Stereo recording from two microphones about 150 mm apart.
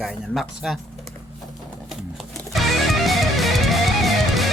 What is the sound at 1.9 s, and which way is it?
Music, centre (ahead or behind).